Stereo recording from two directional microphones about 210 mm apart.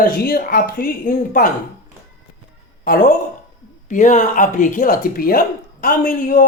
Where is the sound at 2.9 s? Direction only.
40° left (ahead or behind).